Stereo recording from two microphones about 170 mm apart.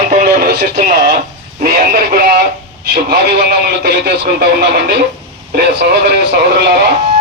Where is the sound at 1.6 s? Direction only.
60° right (ahead or behind).